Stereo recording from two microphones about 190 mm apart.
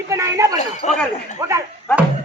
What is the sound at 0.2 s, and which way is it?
Speech, 15° right (ahead or behind).